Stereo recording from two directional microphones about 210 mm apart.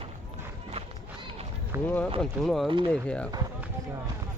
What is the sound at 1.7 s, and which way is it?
Speech, 15° right (ahead or behind).